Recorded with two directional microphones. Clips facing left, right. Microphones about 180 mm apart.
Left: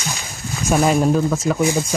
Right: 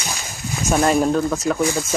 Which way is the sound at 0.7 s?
Centre (ahead or behind).